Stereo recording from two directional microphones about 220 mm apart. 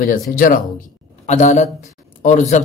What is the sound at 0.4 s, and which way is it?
Speech, 40° left (ahead or behind).